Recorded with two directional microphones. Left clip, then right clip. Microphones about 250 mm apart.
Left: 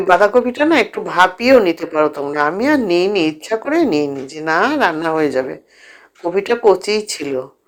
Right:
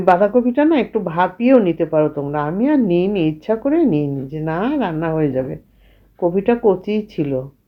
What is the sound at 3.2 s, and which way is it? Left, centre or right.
Speech, centre.